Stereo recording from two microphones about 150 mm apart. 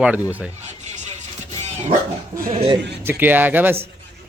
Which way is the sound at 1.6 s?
50° right (ahead or behind).